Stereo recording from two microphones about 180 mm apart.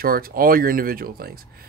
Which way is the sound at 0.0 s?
55° right (ahead or behind).